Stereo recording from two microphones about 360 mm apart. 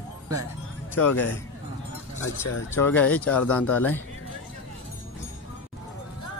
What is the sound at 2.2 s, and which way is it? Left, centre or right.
Speech, left.